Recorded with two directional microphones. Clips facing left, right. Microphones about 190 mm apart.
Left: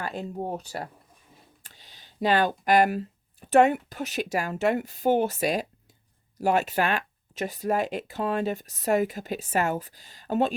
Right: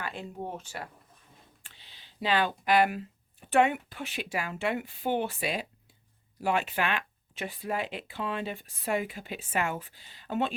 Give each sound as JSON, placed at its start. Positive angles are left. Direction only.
{"t": 0.0, "sound": "speech", "side_deg": 40}